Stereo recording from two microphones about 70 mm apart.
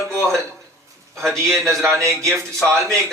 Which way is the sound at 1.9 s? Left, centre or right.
Right.